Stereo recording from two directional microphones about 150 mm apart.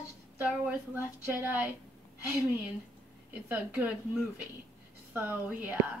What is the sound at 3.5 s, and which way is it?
A woman's voice, 10° right (ahead or behind).